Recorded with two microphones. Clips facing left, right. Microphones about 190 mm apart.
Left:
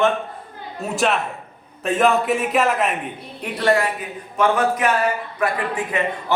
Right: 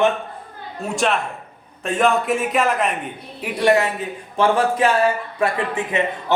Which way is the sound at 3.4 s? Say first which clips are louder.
Right 2 dB; 15° right (ahead or behind).